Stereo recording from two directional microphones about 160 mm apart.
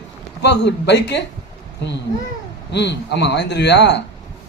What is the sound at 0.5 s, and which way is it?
Speech, 90° left.